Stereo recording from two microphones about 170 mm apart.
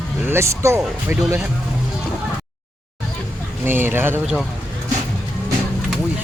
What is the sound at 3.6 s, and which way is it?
Speech, 15° right (ahead or behind).